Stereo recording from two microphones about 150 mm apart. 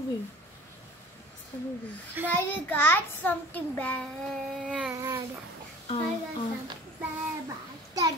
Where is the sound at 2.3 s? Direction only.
15° left (ahead or behind).